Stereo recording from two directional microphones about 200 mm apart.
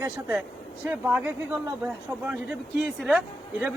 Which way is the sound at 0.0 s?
10° right (ahead or behind).